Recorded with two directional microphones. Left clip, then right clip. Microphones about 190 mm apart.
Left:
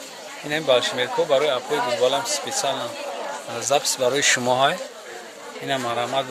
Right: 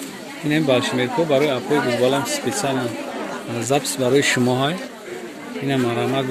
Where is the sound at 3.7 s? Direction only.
10° left (ahead or behind); by 4.8 s 25° left (ahead or behind).